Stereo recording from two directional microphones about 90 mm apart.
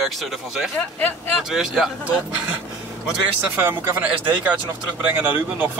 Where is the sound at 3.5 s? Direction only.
25° right (ahead or behind).